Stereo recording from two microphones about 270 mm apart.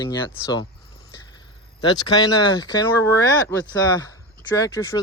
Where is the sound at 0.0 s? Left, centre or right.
Centre.